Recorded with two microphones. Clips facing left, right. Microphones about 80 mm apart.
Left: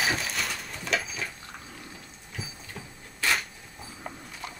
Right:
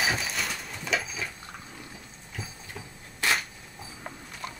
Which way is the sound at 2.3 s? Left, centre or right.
Centre.